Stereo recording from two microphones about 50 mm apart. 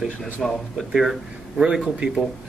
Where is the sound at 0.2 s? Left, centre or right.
Centre.